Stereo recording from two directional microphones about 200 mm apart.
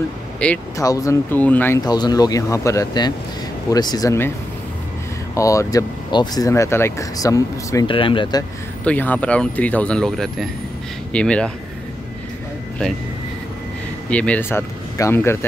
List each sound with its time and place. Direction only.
0.4 s speech: 5° left (ahead or behind)
5.3 s speech: 15° left (ahead or behind)
8.8 s speech: 10° left (ahead or behind)
14.1 s speech: 5° left (ahead or behind)